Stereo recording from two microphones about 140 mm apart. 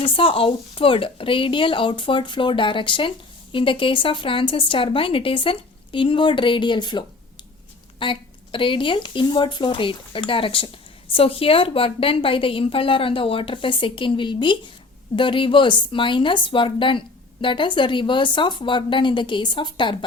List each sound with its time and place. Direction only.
0.0 s speech: 40° left (ahead or behind)